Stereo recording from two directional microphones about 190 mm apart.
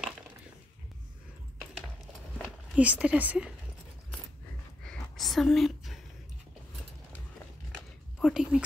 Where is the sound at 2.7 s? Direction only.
5° right (ahead or behind).